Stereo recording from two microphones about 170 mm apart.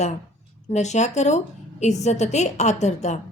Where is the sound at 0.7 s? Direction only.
40° left (ahead or behind).